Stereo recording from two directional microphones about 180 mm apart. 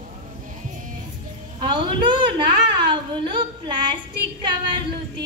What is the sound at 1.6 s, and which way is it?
A woman's voice, 25° right (ahead or behind).